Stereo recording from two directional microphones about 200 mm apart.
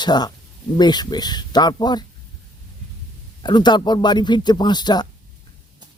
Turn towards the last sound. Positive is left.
turn(degrees=20)  # may be behind; listen again after turning